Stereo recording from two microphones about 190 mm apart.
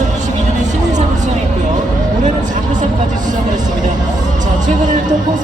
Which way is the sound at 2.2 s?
40° right (ahead or behind).